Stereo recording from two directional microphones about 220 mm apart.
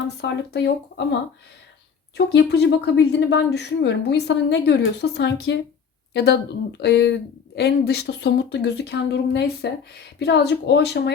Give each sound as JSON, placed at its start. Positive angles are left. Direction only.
{"t": 0.2, "sound": "speech", "side_deg": 50}
{"t": 2.1, "sound": "speech", "side_deg": 50}